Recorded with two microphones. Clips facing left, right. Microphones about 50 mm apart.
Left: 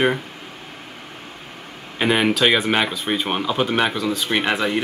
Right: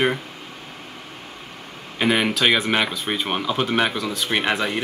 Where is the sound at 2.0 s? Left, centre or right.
Centre.